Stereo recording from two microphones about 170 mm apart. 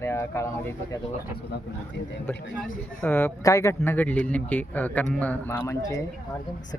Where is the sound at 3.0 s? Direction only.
10° left (ahead or behind).